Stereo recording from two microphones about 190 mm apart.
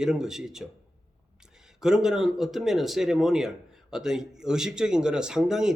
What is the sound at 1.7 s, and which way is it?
Speech, 5° right (ahead or behind).